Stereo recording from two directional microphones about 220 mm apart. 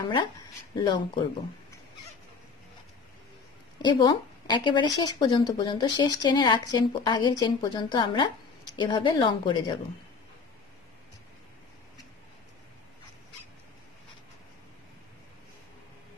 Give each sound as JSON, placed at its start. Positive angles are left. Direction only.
{"t": 0.7, "sound": "speech", "side_deg": 20}
{"t": 3.8, "sound": "speech", "side_deg": 20}